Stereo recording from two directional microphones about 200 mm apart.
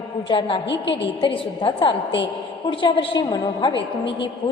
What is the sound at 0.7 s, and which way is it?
Speech, 65° left (ahead or behind).